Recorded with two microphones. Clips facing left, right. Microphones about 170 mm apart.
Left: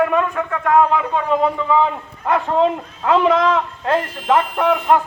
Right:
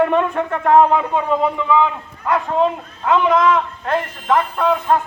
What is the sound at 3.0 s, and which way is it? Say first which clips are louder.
Speech: even; 30° left (ahead or behind).